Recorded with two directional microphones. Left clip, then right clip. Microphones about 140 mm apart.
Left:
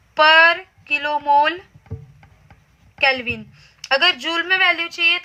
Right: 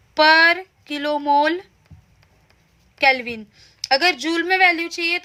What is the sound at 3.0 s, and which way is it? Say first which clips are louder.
Speech: right 1 dB; 60° right (ahead or behind).